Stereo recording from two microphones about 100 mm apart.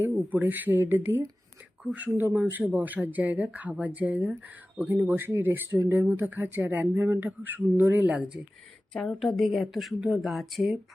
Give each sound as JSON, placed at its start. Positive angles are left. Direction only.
{"t": 0.0, "sound": "speech", "side_deg": -20}
{"t": 8.9, "sound": "speech", "side_deg": 0}